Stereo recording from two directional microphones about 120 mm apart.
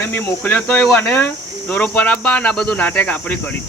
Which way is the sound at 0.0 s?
15° left (ahead or behind).